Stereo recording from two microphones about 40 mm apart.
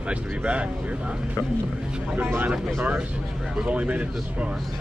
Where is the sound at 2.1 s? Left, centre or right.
Right.